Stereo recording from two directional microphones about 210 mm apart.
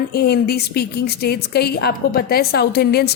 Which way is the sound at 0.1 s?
50° left (ahead or behind).